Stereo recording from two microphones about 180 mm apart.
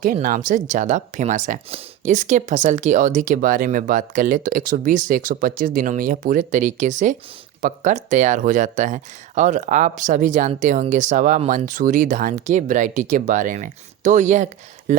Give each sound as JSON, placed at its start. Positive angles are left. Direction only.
{"t": 0.0, "sound": "speech", "side_deg": -50}